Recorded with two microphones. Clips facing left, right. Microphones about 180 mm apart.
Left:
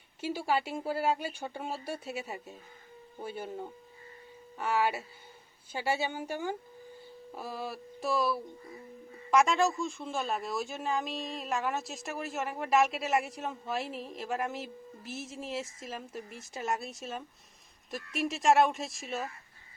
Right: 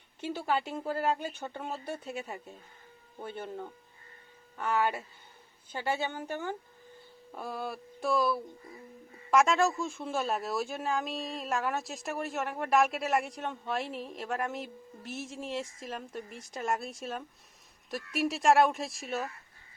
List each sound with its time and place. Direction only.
0.2 s speech: 10° left (ahead or behind)